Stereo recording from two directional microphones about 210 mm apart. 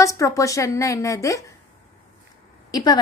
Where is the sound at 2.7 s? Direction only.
20° left (ahead or behind).